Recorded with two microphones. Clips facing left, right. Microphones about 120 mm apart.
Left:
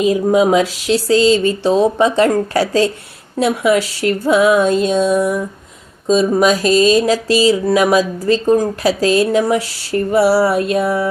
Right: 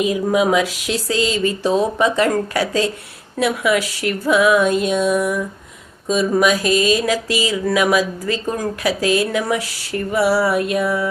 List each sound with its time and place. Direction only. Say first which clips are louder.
0.0 s speech: left 4 dB; 30° left (ahead or behind)
3.3 s a sound: left 4 dB; 30° left (ahead or behind)
6.1 s speech: left 4 dB; 25° left (ahead or behind)